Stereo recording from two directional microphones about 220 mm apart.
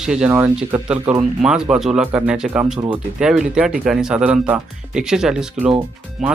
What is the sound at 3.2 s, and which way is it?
Speech, 5° right (ahead or behind).